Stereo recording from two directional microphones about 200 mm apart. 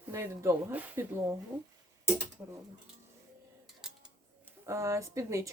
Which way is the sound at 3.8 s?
Centre (ahead or behind).